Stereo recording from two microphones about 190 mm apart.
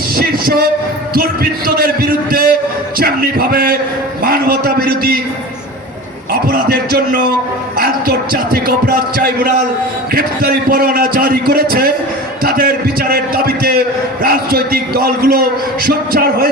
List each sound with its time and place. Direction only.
0.2 s a man's voice: 55° right (ahead or behind)
6.3 s a man's voice: 50° right (ahead or behind)